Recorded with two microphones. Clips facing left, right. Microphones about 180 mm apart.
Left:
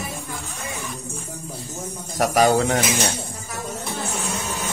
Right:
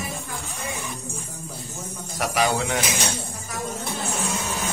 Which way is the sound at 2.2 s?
45° left (ahead or behind).